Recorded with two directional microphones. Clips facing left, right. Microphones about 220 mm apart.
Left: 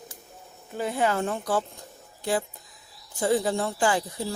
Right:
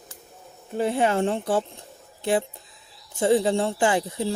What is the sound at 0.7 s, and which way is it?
Speech, 25° right (ahead or behind).